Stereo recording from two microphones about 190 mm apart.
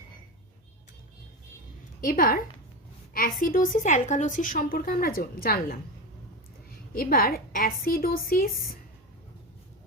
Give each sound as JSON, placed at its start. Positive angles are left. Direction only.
{"t": 2.0, "sound": "a woman's voice", "side_deg": 45}